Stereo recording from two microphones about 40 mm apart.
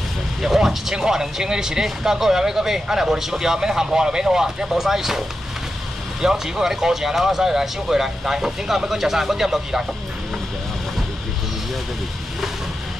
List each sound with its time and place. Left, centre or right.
0.4 s speech: centre
6.2 s speech: centre